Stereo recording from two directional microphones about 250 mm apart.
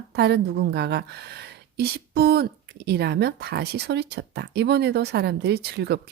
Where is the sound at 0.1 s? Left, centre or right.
Right.